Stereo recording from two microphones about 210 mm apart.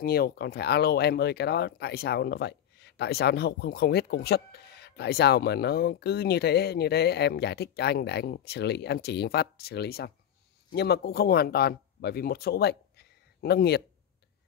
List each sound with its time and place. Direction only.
0.0 s speech: 45° left (ahead or behind)